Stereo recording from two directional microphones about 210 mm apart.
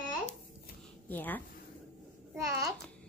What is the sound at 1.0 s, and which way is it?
Speech, 10° left (ahead or behind).